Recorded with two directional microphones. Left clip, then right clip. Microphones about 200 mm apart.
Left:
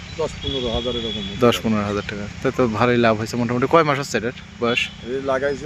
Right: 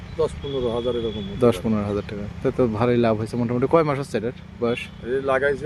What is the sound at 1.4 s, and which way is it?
Speech, centre (ahead or behind).